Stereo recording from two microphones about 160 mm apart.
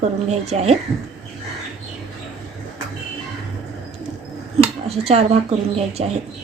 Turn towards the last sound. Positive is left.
turn(degrees=-40)  # may be behind; listen again after turning